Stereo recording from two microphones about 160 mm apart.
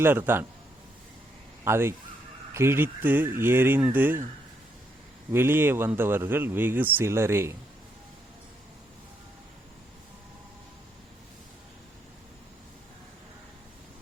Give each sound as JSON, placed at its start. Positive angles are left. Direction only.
{"t": 0.0, "sound": "a man's voice", "side_deg": -15}
{"t": 1.6, "sound": "a man's voice", "side_deg": -15}
{"t": 5.3, "sound": "a man's voice", "side_deg": -15}